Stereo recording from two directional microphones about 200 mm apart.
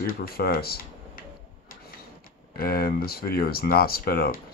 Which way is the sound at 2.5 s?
50° left (ahead or behind).